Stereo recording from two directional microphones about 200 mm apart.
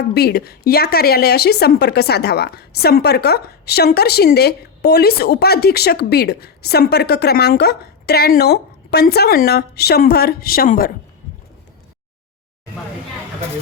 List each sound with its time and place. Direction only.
0.1 s a woman's voice: 50° left (ahead or behind)